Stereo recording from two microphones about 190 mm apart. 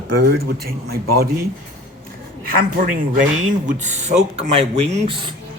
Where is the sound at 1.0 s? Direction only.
55° right (ahead or behind).